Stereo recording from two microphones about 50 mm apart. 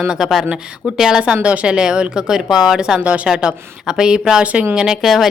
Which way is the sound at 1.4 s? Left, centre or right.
Right.